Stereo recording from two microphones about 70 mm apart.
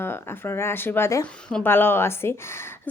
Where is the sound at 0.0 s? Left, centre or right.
Left.